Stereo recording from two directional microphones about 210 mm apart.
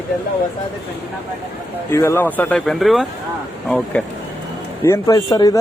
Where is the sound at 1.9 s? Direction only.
15° left (ahead or behind).